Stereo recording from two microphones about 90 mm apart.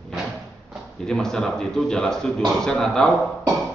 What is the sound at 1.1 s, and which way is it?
A man's voice, 5° left (ahead or behind).